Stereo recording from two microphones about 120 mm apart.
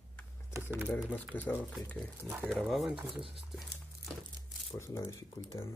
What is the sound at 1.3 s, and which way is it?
Speech, 15° left (ahead or behind).